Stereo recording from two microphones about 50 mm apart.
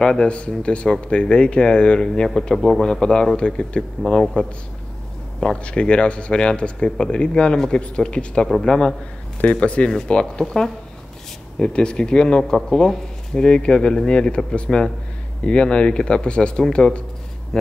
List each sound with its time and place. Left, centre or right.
0.0 s speech: centre